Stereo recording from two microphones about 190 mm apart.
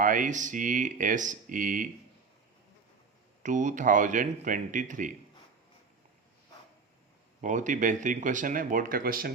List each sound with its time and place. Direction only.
0.0 s speech: 45° right (ahead or behind)
3.4 s speech: 40° right (ahead or behind)
7.4 s speech: 40° right (ahead or behind)